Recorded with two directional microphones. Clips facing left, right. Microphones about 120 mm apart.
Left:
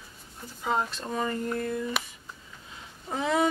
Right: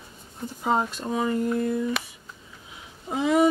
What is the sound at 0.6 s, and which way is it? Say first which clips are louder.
Speech: right 4 dB; 25° right (ahead or behind).